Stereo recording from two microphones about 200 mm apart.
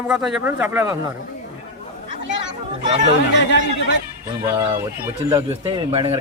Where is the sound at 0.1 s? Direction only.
5° right (ahead or behind).